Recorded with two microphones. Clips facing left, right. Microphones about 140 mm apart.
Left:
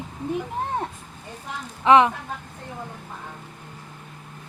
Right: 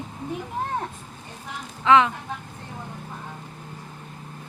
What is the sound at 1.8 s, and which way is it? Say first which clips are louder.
Speech: left 2 dB; 20° left (ahead or behind).